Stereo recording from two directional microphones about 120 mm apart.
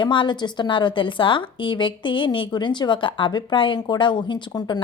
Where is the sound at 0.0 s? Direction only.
40° left (ahead or behind).